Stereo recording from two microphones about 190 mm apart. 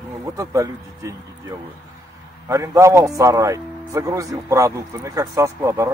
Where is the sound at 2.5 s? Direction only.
15° right (ahead or behind).